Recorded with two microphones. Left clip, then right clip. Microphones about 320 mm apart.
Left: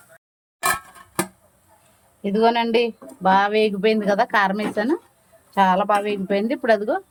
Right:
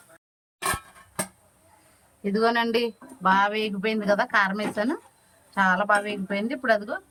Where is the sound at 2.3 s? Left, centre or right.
Centre.